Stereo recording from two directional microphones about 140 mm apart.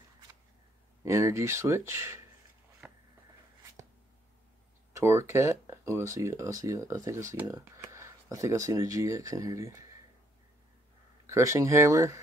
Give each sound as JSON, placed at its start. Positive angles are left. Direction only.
{"t": 1.0, "sound": "speech", "side_deg": -20}
{"t": 4.9, "sound": "speech", "side_deg": -20}
{"t": 11.2, "sound": "speech", "side_deg": -20}